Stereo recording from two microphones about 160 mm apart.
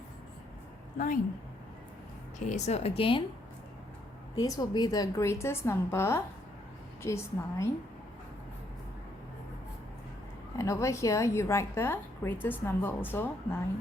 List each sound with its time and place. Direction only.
0.9 s a woman's voice: 55° left (ahead or behind)
2.5 s a woman's voice: 45° left (ahead or behind)
4.4 s a woman's voice: 20° left (ahead or behind)
10.6 s a woman's voice: 20° left (ahead or behind)